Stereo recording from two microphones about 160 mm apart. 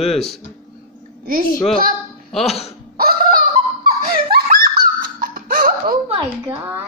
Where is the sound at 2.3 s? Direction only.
Centre (ahead or behind).